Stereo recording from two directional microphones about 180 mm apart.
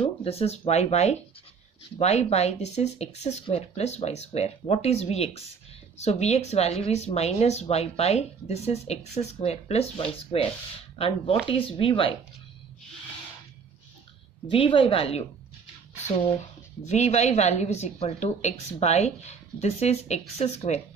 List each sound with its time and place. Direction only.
0.0 s a woman's voice: 30° left (ahead or behind)
14.5 s a woman's voice: 30° left (ahead or behind)
16.8 s a woman's voice: 40° left (ahead or behind)